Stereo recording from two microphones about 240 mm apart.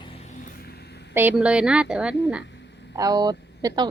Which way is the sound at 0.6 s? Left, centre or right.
Left.